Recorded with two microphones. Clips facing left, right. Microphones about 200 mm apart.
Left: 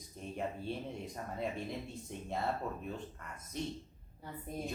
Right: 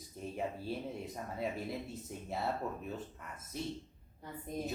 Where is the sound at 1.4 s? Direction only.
5° right (ahead or behind).